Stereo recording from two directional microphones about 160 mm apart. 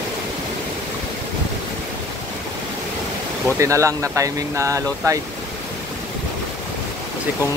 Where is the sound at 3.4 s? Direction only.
20° right (ahead or behind).